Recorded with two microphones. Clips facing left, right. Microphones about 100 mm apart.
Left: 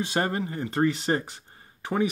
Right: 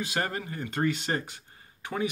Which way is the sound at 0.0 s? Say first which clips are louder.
Left 5 dB; 30° left (ahead or behind).